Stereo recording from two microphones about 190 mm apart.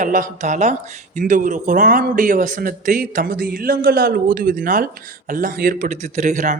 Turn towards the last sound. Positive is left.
turn(degrees=-40)  # may be behind; listen again after turning